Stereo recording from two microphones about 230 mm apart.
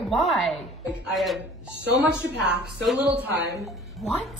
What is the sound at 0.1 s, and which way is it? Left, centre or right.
A woman's voice, centre.